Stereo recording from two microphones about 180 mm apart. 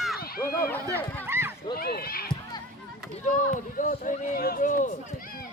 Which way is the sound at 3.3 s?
45° left (ahead or behind).